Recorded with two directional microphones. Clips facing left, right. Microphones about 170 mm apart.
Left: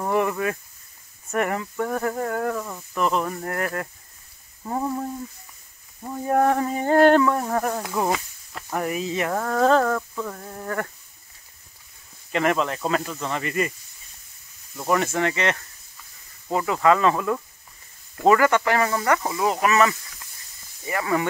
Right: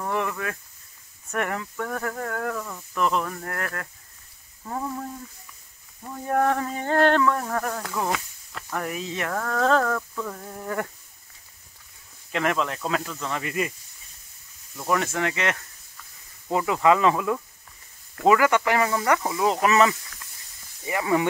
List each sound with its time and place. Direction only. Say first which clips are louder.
0.0 s a sound: left 5 dB; 15° left (ahead or behind)
1.3 s insect: left 4 dB; 5° left (ahead or behind)
3.0 s speech: left 1 dB; 5° left (ahead or behind)
3.3 s insect: left 4 dB; 15° left (ahead or behind)
4.6 s a sound: left 4 dB; 20° left (ahead or behind)
6.2 s insect: left 3 dB; 10° left (ahead or behind)
8.8 s insect: left 6 dB; 5° left (ahead or behind)
10.3 s speech: left 1 dB; centre (ahead or behind)
12.3 s speech: left 3 dB; centre (ahead or behind)
14.8 s speech: left 3 dB; centre (ahead or behind)
16.5 s speech: left 1 dB; 10° right (ahead or behind)
19.6 s speech: even; 25° right (ahead or behind)